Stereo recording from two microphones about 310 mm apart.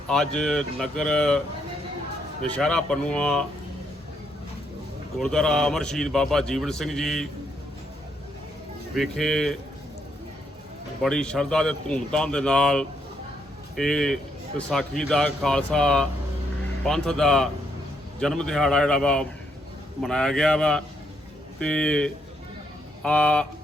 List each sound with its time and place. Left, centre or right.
0.1 s a man's voice: centre
2.6 s a man's voice: centre
5.1 s a man's voice: centre
9.0 s a man's voice: centre
11.0 s a man's voice: centre